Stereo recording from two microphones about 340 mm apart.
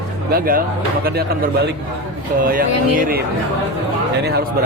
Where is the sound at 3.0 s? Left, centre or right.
Right.